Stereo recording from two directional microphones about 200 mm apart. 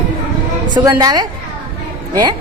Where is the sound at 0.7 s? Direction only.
20° right (ahead or behind).